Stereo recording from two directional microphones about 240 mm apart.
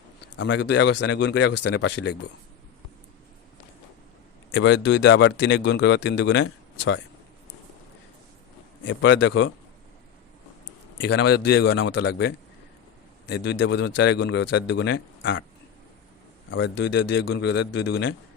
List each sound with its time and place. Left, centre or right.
0.3 s speech: left
4.5 s speech: left
8.8 s speech: left
10.9 s speech: left
16.5 s speech: left